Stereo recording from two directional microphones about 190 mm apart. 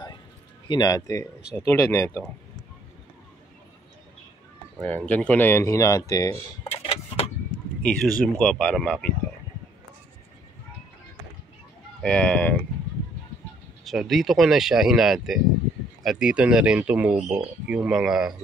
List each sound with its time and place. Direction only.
0.7 s speech: 20° left (ahead or behind)
4.8 s speech: 10° left (ahead or behind)
6.7 s vehicle: 30° left (ahead or behind)
7.8 s speech: 5° left (ahead or behind)
12.0 s speech: 5° left (ahead or behind)
13.8 s speech: centre (ahead or behind)